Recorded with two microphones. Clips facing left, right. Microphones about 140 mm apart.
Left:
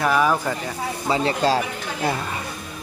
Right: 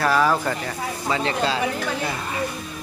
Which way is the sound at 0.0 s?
15° left (ahead or behind).